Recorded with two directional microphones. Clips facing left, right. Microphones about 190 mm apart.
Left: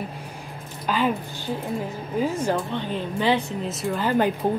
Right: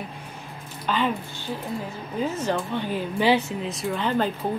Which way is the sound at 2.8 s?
10° right (ahead or behind).